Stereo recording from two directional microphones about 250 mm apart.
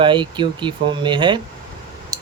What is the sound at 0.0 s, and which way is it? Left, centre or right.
Speech, centre.